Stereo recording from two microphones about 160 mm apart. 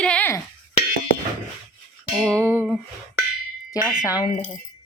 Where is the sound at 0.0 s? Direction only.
10° left (ahead or behind).